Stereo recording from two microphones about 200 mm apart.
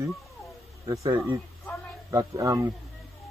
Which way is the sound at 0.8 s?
15° right (ahead or behind).